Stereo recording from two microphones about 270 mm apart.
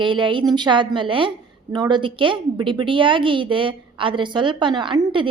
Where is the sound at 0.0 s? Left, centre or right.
Centre.